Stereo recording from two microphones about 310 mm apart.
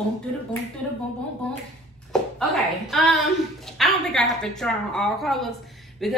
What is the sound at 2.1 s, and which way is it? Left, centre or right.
A woman's voice, centre.